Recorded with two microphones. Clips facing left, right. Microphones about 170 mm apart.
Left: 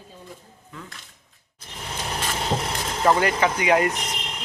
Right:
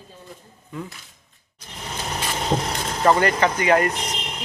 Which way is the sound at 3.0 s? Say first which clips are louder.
Right 2 dB; 5° left (ahead or behind).